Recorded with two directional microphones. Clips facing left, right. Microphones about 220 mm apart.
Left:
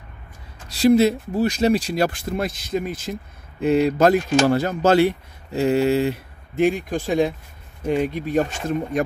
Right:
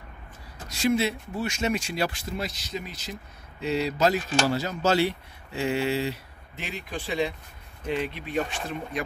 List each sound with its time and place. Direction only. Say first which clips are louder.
0.7 s speech: left 9 dB; 35° left (ahead or behind)